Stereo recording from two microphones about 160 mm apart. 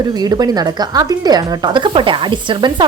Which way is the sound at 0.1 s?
25° right (ahead or behind).